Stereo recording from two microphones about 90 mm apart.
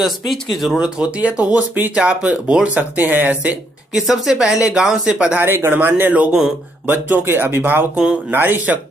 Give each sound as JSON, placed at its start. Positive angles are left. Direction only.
{"t": 0.0, "sound": "speech", "side_deg": 0}
{"t": 3.9, "sound": "a woman's voice", "side_deg": -5}
{"t": 5.4, "sound": "speech", "side_deg": -25}